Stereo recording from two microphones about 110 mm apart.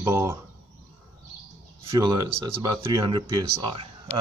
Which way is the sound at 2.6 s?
30° right (ahead or behind).